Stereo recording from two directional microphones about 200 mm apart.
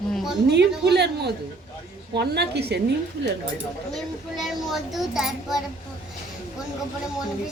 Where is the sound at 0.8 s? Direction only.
55° right (ahead or behind).